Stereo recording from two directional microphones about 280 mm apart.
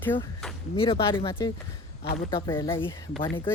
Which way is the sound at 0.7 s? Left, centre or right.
Centre.